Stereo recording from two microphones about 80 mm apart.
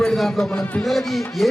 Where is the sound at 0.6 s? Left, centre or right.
Centre.